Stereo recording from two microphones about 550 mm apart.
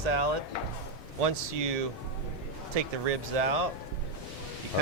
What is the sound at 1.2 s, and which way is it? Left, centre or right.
Speech, right.